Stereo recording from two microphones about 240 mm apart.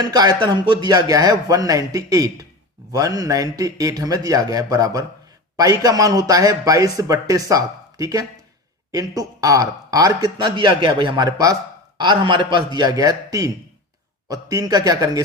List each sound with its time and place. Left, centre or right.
0.0 s speech: centre